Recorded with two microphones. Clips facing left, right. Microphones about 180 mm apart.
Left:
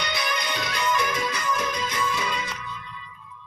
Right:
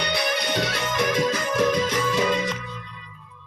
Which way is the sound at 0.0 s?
65° right (ahead or behind).